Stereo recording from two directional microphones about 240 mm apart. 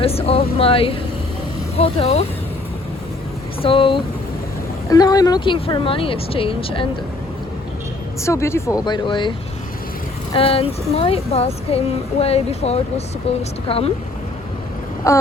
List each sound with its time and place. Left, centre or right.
0.0 s speech: left
3.6 s speech: left
8.2 s speech: centre
10.3 s speech: left
15.1 s speech: centre